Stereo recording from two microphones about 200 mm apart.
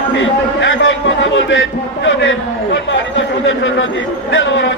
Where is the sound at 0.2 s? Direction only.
70° left (ahead or behind).